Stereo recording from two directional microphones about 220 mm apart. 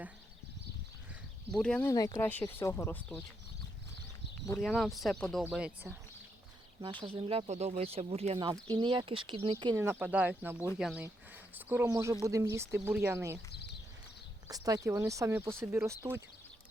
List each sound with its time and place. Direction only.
1.5 s speech: 5° left (ahead or behind)
1.9 s speech: 15° left (ahead or behind)
4.6 s speech: centre (ahead or behind)
7.0 s speech: 25° right (ahead or behind)
13.5 s a sound: 50° left (ahead or behind)
14.4 s speech: 15° right (ahead or behind)